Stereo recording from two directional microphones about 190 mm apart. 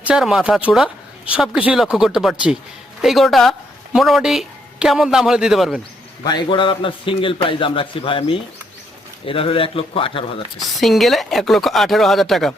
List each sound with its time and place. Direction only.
0.0 s speech: 5° right (ahead or behind)
6.2 s a man's voice: 25° left (ahead or behind)
10.6 s speech: centre (ahead or behind)